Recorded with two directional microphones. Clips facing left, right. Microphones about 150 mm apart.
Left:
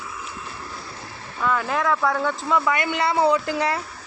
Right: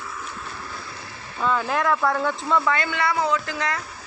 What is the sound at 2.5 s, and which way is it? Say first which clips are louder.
Speech: left 1 dB; 15° left (ahead or behind).